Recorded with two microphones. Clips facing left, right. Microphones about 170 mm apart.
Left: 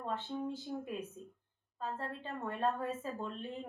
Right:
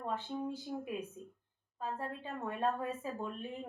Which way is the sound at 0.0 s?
10° right (ahead or behind).